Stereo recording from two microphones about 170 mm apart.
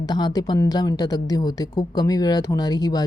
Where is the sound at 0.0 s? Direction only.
25° left (ahead or behind).